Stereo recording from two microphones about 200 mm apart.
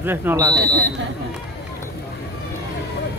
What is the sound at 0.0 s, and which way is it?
Speech, 10° right (ahead or behind).